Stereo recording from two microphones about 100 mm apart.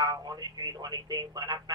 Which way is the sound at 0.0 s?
40° right (ahead or behind).